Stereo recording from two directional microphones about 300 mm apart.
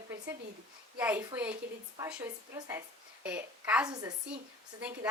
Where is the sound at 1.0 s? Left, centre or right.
Centre.